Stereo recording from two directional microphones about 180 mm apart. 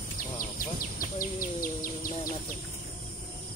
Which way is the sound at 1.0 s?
50° left (ahead or behind).